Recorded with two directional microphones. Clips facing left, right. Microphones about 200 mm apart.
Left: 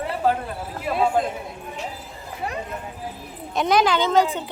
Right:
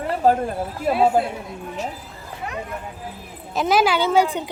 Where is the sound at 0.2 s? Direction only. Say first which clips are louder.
Right 4 dB; 40° right (ahead or behind).